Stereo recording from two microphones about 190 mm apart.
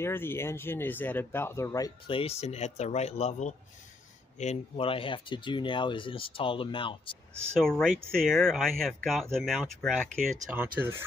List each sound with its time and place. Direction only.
0.0 s speech: 10° left (ahead or behind)
2.0 s speech: 30° left (ahead or behind)
7.5 s speech: 5° left (ahead or behind)
10.4 s speech: 10° right (ahead or behind)